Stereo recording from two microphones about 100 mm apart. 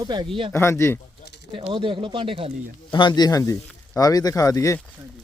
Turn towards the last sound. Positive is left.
turn(degrees=35)  # may be behind; listen again after turning